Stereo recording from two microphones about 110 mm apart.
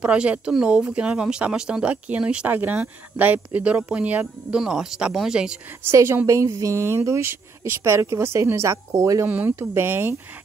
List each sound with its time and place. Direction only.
0.0 s speech: 10° right (ahead or behind)
5.9 s a woman's voice: 20° right (ahead or behind)
9.3 s a woman's voice: 15° right (ahead or behind)